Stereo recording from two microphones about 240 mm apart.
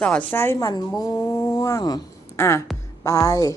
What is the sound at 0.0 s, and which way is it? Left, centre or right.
Speech, centre.